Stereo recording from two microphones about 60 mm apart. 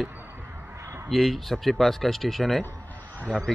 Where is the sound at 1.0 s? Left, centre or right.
Centre.